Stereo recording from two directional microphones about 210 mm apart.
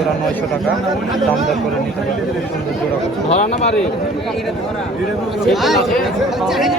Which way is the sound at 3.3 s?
35° left (ahead or behind).